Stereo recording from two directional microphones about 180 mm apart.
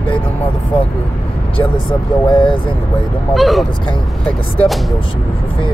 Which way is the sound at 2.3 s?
25° left (ahead or behind).